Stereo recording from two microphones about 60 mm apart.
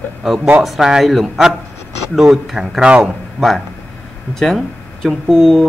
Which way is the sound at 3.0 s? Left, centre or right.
Centre.